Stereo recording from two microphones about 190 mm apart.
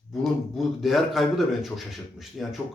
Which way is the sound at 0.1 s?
Centre (ahead or behind).